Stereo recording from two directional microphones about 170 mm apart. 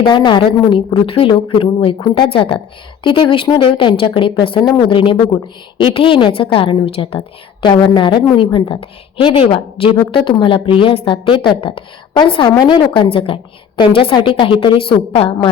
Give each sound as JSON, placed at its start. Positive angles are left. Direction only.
{"t": 0.0, "sound": "a woman's voice", "side_deg": 25}